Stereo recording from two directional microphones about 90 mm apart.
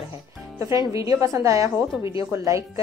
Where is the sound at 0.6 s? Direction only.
40° right (ahead or behind).